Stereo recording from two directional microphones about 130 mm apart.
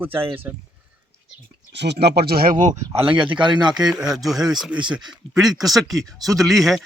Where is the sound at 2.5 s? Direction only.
80° right.